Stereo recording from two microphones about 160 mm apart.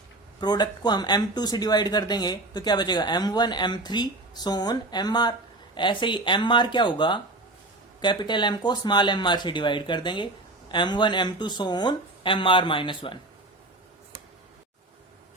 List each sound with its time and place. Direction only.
0.3 s speech: 25° left (ahead or behind)